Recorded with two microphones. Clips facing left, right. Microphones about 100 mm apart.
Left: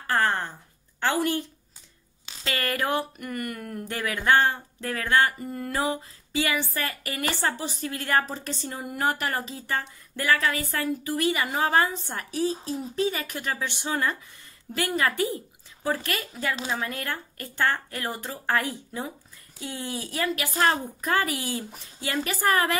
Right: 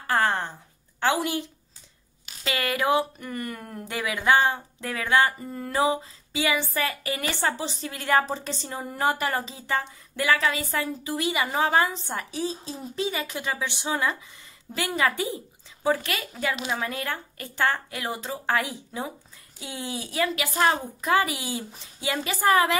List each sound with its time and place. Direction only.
0.0 s a sound: 20° right (ahead or behind)
1.0 s a woman's voice: 10° right (ahead or behind)
2.5 s a woman's voice: 15° right (ahead or behind)
3.8 s a woman's voice: 15° right (ahead or behind)
5.4 s a woman's voice: 30° right (ahead or behind)